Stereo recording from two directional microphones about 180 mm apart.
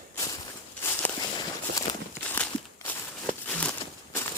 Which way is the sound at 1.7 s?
75° right (ahead or behind).